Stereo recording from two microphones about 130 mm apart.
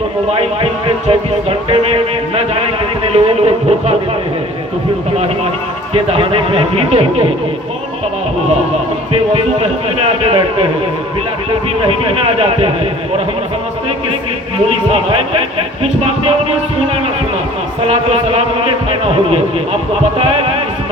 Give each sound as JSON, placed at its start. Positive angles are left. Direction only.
{"t": 0.3, "sound": "speech", "side_deg": -50}
{"t": 5.9, "sound": "speech", "side_deg": -45}
{"t": 9.1, "sound": "speech", "side_deg": -50}
{"t": 11.8, "sound": "speech", "side_deg": -45}
{"t": 14.9, "sound": "speech", "side_deg": -45}
{"t": 17.8, "sound": "speech", "side_deg": -50}